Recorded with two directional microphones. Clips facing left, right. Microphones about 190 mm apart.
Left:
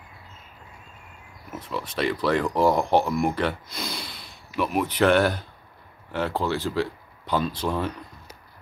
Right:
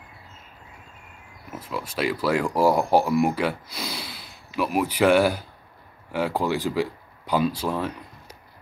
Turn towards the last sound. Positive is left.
turn(degrees=-5)  # may be behind; listen again after turning